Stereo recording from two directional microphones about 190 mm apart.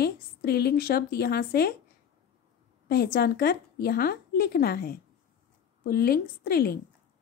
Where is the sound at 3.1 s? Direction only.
55° left (ahead or behind).